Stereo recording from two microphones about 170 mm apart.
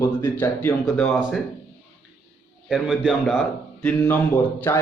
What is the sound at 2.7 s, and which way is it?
A man's voice, centre (ahead or behind).